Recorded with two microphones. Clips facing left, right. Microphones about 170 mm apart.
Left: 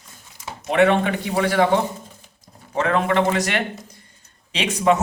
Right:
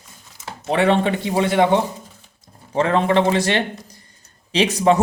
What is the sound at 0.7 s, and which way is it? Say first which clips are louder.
Speech: even; 30° right (ahead or behind).